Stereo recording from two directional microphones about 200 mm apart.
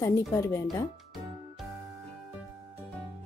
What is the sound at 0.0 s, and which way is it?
Speech, 15° left (ahead or behind).